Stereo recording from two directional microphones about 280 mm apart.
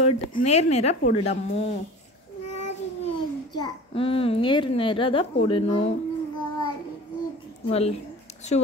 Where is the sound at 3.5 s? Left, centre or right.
Centre.